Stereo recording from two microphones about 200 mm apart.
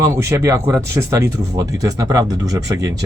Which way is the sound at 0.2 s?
15° right (ahead or behind).